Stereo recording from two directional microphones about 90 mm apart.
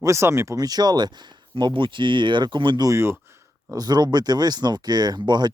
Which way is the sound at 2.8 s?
35° right (ahead or behind).